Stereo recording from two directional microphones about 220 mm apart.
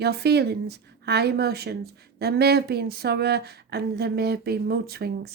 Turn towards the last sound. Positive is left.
turn(degrees=-45)  # may be behind; listen again after turning